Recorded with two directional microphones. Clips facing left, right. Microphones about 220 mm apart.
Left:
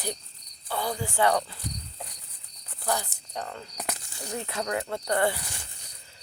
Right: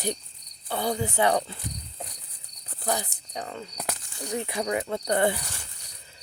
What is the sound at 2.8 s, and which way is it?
Cricket, 20° right (ahead or behind).